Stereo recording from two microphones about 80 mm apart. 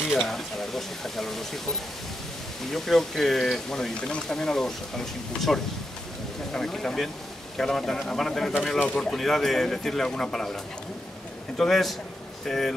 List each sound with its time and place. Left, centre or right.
0.1 s speech: centre
2.7 s speech: centre
9.1 s a man's voice: centre